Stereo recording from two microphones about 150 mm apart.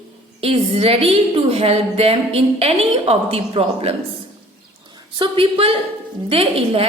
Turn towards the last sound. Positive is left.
turn(degrees=-40)  # may be behind; listen again after turning